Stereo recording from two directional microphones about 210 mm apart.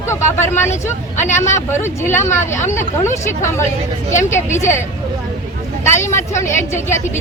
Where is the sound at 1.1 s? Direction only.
35° left (ahead or behind).